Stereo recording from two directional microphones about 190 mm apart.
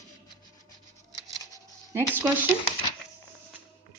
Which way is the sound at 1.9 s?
15° right (ahead or behind).